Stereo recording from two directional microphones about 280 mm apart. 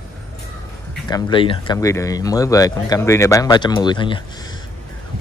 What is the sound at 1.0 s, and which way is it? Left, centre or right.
Speech, centre.